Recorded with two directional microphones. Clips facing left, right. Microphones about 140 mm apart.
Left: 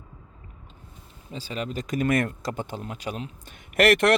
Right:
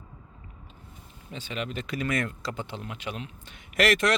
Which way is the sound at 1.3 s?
35° left (ahead or behind).